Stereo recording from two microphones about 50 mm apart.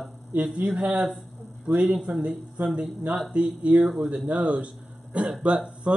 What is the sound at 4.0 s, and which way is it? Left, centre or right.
A man's voice, right.